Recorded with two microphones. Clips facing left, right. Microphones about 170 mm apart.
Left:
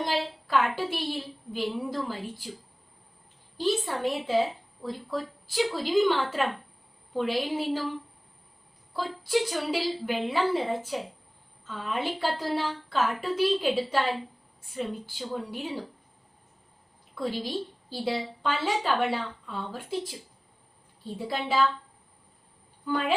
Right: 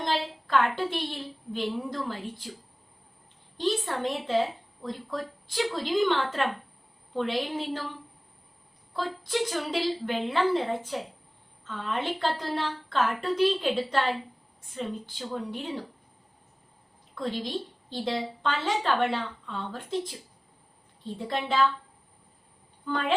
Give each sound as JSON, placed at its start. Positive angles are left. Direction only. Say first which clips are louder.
{"t": 0.0, "sound": "a sound", "louder": "even", "side_deg": 10}
{"t": 1.5, "sound": "a woman's voice", "louder": "left 1 dB", "side_deg": 5}
{"t": 3.6, "sound": "a woman's voice", "louder": "left 1 dB", "side_deg": 10}
{"t": 8.9, "sound": "a woman's voice", "louder": "left 3 dB", "side_deg": 10}
{"t": 17.2, "sound": "a woman's voice", "louder": "left 1 dB", "side_deg": 10}
{"t": 21.0, "sound": "a woman's voice", "louder": "even", "side_deg": 5}
{"t": 22.9, "sound": "a woman's voice", "louder": "left 1 dB", "side_deg": 10}